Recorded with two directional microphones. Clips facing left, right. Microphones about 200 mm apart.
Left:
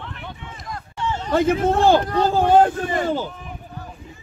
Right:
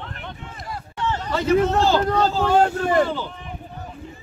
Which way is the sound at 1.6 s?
55° left (ahead or behind).